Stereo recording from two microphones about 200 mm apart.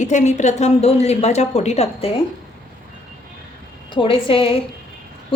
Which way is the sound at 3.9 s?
25° left (ahead or behind).